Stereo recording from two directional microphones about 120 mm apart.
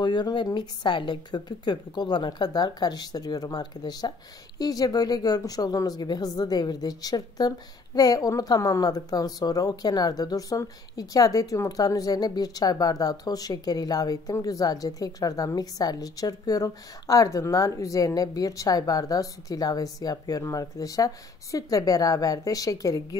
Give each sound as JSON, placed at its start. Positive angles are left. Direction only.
{"t": 0.0, "sound": "speech", "side_deg": 40}